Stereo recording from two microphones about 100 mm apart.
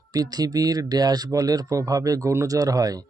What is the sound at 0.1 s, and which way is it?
Speech, 40° right (ahead or behind).